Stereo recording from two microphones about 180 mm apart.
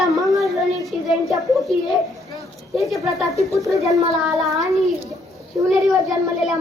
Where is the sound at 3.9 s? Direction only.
20° right (ahead or behind).